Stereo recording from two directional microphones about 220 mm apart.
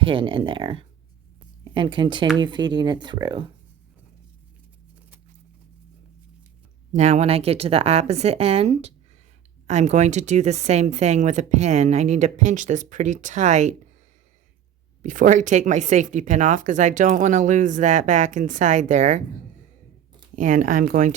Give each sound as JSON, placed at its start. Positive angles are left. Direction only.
{"t": 0.0, "sound": "a woman's voice", "side_deg": -25}
{"t": 6.9, "sound": "a woman's voice", "side_deg": -30}
{"t": 15.0, "sound": "speech", "side_deg": -35}
{"t": 20.3, "sound": "speech", "side_deg": -35}